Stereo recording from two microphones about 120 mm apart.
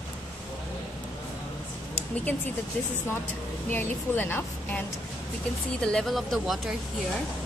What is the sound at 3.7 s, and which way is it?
A woman's voice, 15° left (ahead or behind).